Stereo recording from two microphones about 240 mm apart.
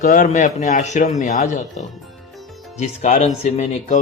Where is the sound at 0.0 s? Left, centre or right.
Left.